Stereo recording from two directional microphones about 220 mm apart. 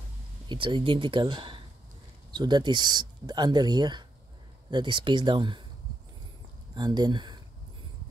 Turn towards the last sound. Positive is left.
turn(degrees=-20)  # may be behind; listen again after turning